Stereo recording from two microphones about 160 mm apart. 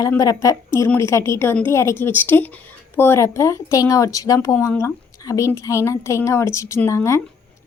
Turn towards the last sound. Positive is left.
turn(degrees=20)  # may be behind; listen again after turning